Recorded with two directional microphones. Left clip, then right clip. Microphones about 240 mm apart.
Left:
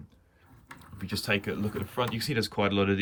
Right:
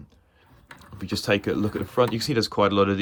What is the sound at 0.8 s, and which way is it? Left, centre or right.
Speech, centre.